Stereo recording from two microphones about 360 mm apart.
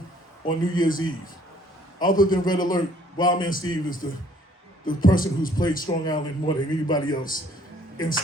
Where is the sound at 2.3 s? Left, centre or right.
Centre.